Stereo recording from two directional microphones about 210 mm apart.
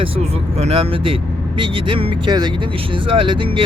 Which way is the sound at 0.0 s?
30° right (ahead or behind).